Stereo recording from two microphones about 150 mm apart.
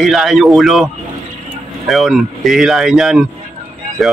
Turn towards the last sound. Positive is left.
turn(degrees=0)  # may be behind; listen again after turning